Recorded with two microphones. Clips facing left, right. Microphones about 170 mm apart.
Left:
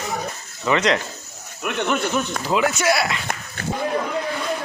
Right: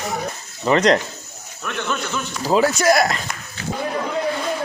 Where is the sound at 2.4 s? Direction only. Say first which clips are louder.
Right 6 dB; 35° right (ahead or behind).